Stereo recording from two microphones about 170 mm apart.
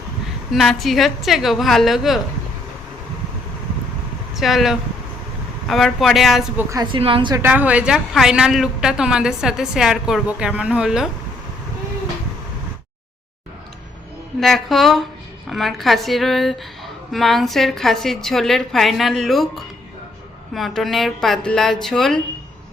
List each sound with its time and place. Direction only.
0.5 s a woman's voice: centre (ahead or behind)
4.4 s a woman's voice: centre (ahead or behind)
6.6 s a woman's voice: 20° right (ahead or behind)
6.8 s a woman's voice: 30° right (ahead or behind)
7.4 s a woman's voice: 10° right (ahead or behind)
14.4 s a woman's voice: centre (ahead or behind)
20.5 s a woman's voice: centre (ahead or behind)